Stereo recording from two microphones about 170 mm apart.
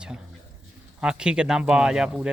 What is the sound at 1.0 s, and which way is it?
Speech, 5° right (ahead or behind).